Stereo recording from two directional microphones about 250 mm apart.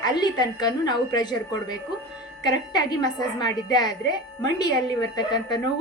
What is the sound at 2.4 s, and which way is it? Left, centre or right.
A woman's voice, centre.